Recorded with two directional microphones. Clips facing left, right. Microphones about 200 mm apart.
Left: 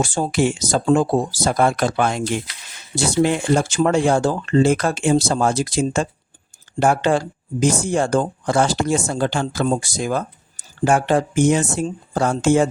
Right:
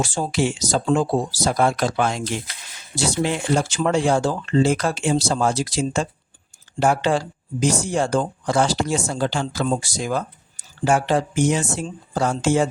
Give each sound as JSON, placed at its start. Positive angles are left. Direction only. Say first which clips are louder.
{"t": 0.0, "sound": "speech", "louder": "left 3 dB", "side_deg": 50}